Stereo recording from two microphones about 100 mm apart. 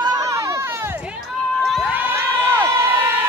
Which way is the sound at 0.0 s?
40° right (ahead or behind).